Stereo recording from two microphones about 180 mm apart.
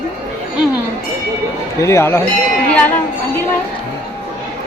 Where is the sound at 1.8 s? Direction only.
15° left (ahead or behind).